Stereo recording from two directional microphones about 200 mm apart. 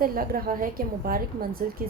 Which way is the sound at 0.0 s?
45° right (ahead or behind).